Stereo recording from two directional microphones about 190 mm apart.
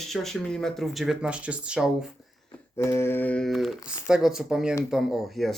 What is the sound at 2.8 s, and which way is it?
Speech, 15° left (ahead or behind).